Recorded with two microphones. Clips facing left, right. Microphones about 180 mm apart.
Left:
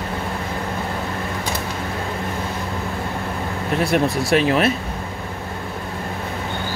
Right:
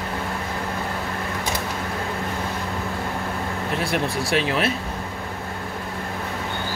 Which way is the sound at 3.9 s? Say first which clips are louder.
Left 6 dB; 45° left (ahead or behind).